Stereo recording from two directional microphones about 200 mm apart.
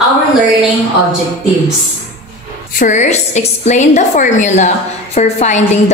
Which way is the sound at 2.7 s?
35° left (ahead or behind).